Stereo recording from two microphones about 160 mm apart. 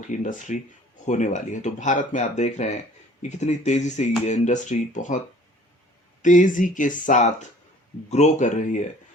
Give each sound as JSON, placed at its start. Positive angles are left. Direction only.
{"t": 0.1, "sound": "speech", "side_deg": 50}
{"t": 6.2, "sound": "speech", "side_deg": 55}